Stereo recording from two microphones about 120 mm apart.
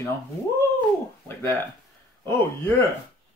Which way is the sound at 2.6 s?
20° left (ahead or behind).